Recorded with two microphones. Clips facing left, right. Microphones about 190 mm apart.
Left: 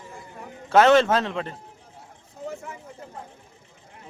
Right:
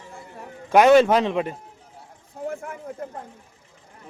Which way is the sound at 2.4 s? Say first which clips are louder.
Right 4 dB; 55° right (ahead or behind).